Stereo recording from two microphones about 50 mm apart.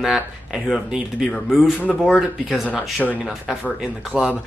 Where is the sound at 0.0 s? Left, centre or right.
Centre.